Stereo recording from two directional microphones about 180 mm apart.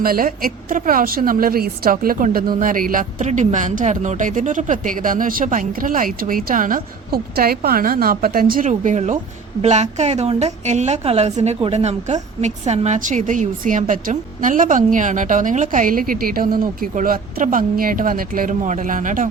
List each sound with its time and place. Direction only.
0.0 s a woman's voice: 55° right (ahead or behind)